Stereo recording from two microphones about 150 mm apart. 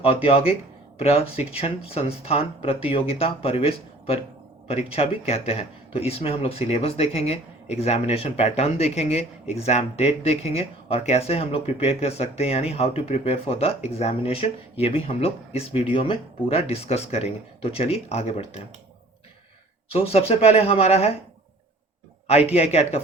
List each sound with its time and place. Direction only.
0.0 s speech: 40° left (ahead or behind)
19.9 s speech: 40° left (ahead or behind)
22.4 s speech: 45° left (ahead or behind)